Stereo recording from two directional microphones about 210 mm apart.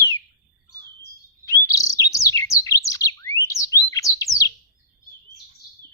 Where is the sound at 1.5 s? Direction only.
15° left (ahead or behind).